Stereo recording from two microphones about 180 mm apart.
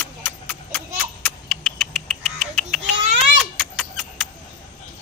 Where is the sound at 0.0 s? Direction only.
10° left (ahead or behind).